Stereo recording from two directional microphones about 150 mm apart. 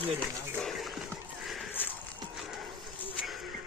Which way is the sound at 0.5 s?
Centre (ahead or behind).